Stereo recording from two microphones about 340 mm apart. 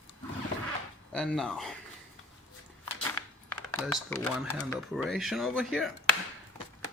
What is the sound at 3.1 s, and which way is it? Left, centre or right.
Speech, centre.